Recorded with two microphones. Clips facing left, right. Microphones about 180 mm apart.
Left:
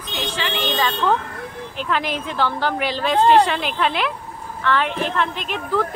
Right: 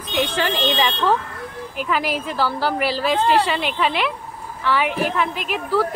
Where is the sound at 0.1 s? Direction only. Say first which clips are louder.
Right 6 dB; 60° right (ahead or behind).